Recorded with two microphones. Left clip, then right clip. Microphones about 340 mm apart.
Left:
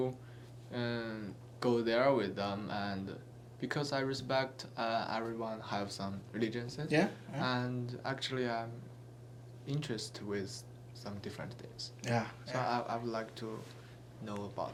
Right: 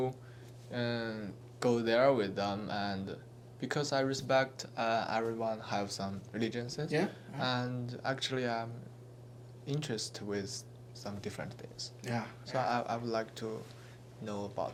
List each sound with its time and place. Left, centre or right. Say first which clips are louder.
0.7 s speech: right 2 dB; right
6.9 s speech: left 3 dB; left
7.3 s speech: right 2 dB; right
12.0 s speech: left 4 dB; left
12.5 s speech: right 4 dB; right